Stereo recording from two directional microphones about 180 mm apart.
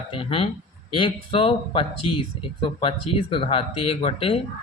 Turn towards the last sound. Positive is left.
turn(degrees=30)  # may be behind; listen again after turning